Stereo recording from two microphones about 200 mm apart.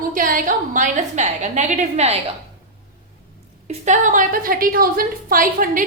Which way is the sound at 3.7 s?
35° right (ahead or behind).